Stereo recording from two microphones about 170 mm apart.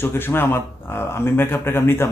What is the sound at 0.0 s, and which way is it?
Speech, 10° left (ahead or behind).